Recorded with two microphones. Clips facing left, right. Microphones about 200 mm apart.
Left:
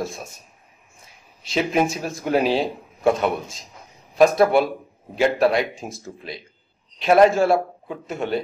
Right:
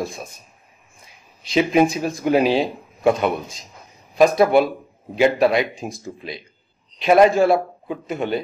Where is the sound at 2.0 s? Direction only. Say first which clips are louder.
Right 3 dB; centre (ahead or behind).